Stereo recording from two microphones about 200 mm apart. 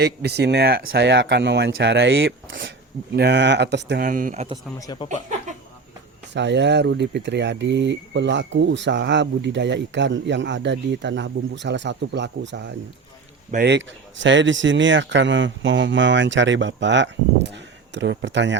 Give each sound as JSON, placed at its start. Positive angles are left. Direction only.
{"t": 0.0, "sound": "speech", "side_deg": -55}
{"t": 4.8, "sound": "speech", "side_deg": 20}
{"t": 6.3, "sound": "speech", "side_deg": -60}